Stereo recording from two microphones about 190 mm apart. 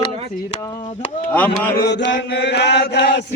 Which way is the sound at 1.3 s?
10° left (ahead or behind).